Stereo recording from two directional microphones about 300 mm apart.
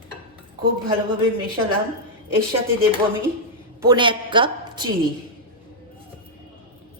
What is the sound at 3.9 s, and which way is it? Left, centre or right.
A woman's voice, centre.